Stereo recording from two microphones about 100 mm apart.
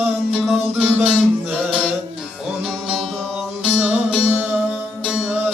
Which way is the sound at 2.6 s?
5° right (ahead or behind).